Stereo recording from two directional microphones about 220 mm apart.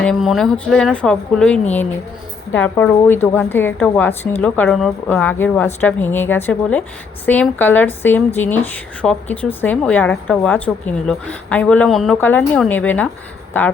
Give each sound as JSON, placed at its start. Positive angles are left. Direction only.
{"t": 0.0, "sound": "a woman's voice", "side_deg": 0}